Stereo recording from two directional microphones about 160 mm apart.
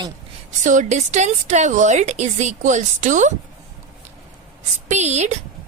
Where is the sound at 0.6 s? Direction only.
50° right (ahead or behind).